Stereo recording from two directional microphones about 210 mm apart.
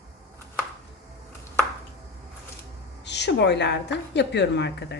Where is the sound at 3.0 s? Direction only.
55° left (ahead or behind).